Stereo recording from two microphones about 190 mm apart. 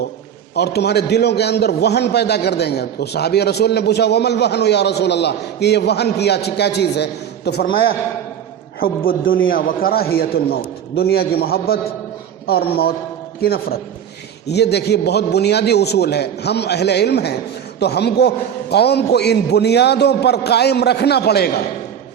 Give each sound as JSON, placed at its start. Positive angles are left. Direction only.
{"t": 0.5, "sound": "a man's voice", "side_deg": 60}